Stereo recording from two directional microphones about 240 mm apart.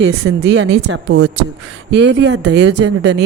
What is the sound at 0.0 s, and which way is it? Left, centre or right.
Speech, right.